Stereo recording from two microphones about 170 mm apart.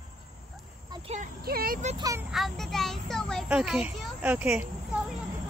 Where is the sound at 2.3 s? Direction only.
Centre (ahead or behind).